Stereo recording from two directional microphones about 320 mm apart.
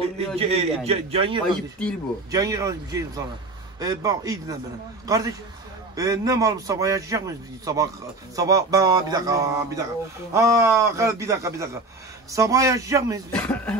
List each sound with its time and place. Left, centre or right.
0.4 s a man's voice: centre
13.3 s speech: centre